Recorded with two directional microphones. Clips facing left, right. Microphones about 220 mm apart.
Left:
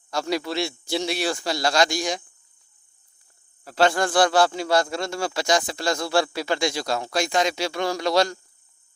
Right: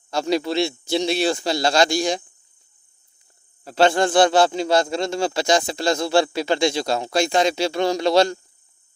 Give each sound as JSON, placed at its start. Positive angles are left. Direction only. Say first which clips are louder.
{"t": 0.1, "sound": "speech", "louder": "right 4 dB", "side_deg": -25}
{"t": 3.6, "sound": "speech", "louder": "right 3 dB", "side_deg": -25}